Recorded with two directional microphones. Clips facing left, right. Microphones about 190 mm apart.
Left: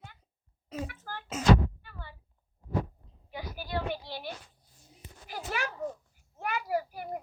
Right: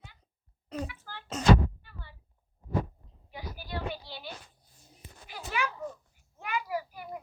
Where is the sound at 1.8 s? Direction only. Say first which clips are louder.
Left 4 dB; 65° left (ahead or behind).